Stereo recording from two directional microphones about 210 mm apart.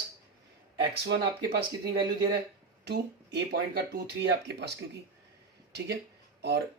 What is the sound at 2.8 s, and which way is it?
Speech, 50° right (ahead or behind).